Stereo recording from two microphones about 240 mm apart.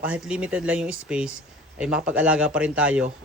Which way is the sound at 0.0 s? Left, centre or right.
Centre.